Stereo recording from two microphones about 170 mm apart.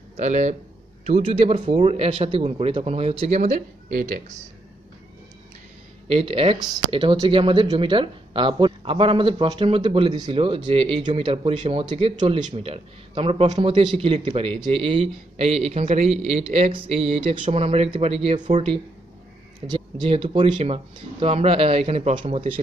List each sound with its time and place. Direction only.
0.2 s speech: 45° right (ahead or behind)
6.0 s speech: 35° right (ahead or behind)